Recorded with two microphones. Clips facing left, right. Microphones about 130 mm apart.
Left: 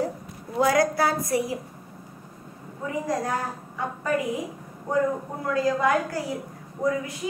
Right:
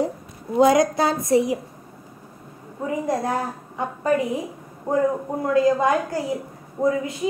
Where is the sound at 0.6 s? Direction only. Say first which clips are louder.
Right 5 dB; 20° right (ahead or behind).